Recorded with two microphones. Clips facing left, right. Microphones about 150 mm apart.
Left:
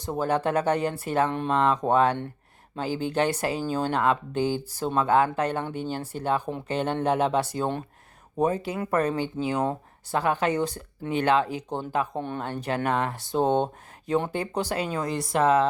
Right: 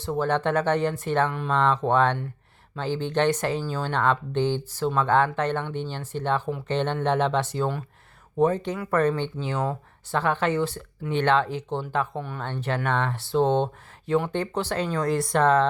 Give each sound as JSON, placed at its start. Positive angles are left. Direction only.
{"t": 0.0, "sound": "speech", "side_deg": 15}
{"t": 1.3, "sound": "speech", "side_deg": 25}
{"t": 1.5, "sound": "speech", "side_deg": 10}